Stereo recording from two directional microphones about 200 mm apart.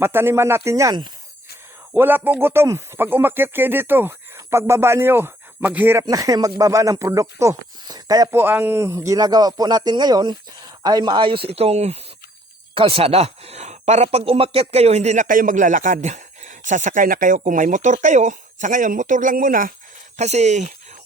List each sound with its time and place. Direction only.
0.0 s speech: 10° right (ahead or behind); by 19.7 s 45° right (ahead or behind)
20.1 s speech: 35° right (ahead or behind)